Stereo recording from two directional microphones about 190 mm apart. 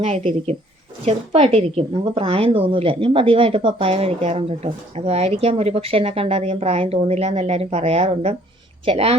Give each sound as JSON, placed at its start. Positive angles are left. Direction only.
{"t": 0.0, "sound": "a woman's voice", "side_deg": -35}